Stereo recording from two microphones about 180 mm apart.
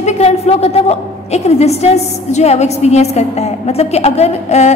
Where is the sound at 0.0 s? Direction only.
35° left (ahead or behind).